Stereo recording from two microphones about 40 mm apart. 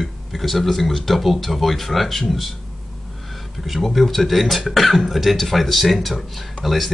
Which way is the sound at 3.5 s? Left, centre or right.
Centre.